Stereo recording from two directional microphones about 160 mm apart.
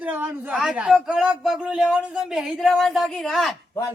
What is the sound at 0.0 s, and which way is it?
Speech, 10° right (ahead or behind).